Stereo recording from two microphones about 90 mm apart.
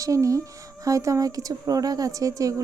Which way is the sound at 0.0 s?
40° right (ahead or behind).